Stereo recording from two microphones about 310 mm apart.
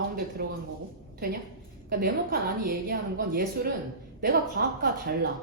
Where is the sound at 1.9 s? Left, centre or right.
Right.